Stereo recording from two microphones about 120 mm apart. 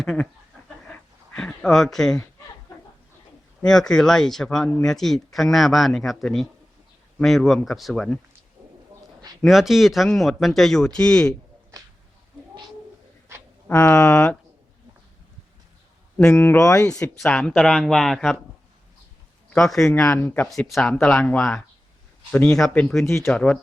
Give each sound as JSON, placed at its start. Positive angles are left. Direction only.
{"t": 0.9, "sound": "a sound", "side_deg": 10}
{"t": 3.7, "sound": "speech", "side_deg": 5}
{"t": 9.4, "sound": "speech", "side_deg": 0}
{"t": 13.7, "sound": "speech", "side_deg": 15}
{"t": 16.1, "sound": "speech", "side_deg": 15}
{"t": 19.5, "sound": "speech", "side_deg": 5}
{"t": 20.5, "sound": "speech", "side_deg": 0}
{"t": 23.0, "sound": "speech", "side_deg": 25}
{"t": 23.3, "sound": "speech", "side_deg": 10}